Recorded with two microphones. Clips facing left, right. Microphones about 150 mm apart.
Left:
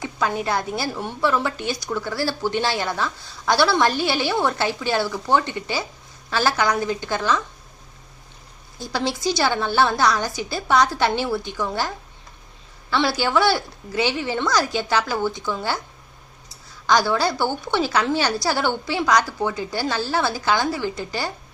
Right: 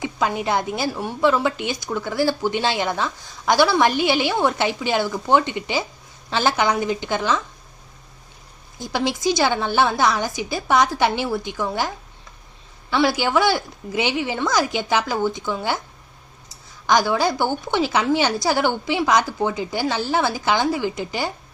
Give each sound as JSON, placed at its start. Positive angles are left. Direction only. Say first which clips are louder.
{"t": 0.0, "sound": "a woman's voice", "louder": "right 1 dB", "side_deg": -15}
{"t": 8.8, "sound": "a woman's voice", "louder": "right 2 dB", "side_deg": -15}
{"t": 12.9, "sound": "a woman's voice", "louder": "right 2 dB", "side_deg": -15}
{"t": 16.8, "sound": "a woman's voice", "louder": "right 1 dB", "side_deg": -15}